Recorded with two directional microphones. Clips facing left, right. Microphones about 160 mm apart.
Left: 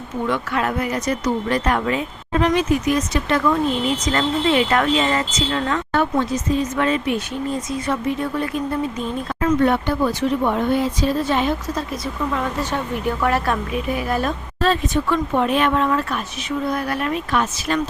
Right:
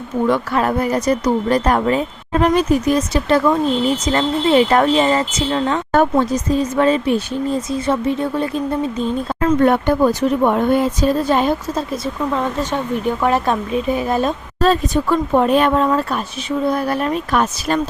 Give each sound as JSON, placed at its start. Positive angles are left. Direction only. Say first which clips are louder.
{"t": 0.3, "sound": "speech", "louder": "right 4 dB", "side_deg": -35}
{"t": 5.9, "sound": "speech", "louder": "right 6 dB", "side_deg": -40}
{"t": 9.6, "sound": "speech", "louder": "right 6 dB", "side_deg": -50}
{"t": 13.2, "sound": "speech", "louder": "right 3 dB", "side_deg": -20}
{"t": 14.6, "sound": "speech", "louder": "right 4 dB", "side_deg": -40}